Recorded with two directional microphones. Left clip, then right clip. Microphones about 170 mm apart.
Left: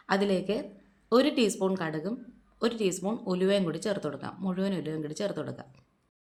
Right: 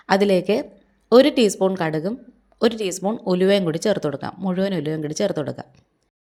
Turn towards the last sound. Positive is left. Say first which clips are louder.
# right 10 dB
turn(degrees=-40)  # may be behind; listen again after turning